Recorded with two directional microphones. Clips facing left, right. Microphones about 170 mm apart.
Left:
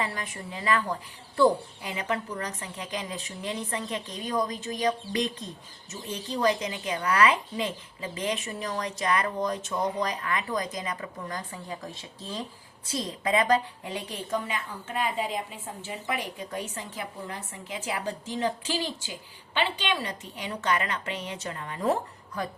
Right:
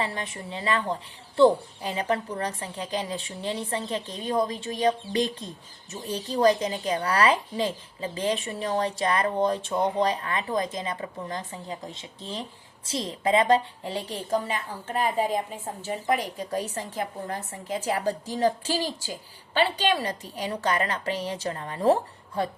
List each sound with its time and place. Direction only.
0.0 s a woman's voice: 25° right (ahead or behind)